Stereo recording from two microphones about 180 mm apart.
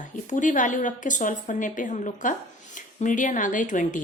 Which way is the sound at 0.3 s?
45° left (ahead or behind).